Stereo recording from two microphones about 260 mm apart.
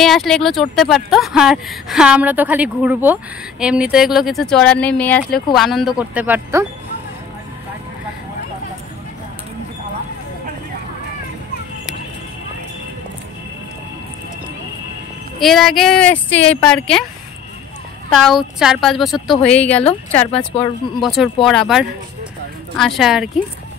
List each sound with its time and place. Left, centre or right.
0.0 s speech: centre
15.3 s speech: centre
18.2 s speech: centre
19.8 s speech: left
21.0 s speech: centre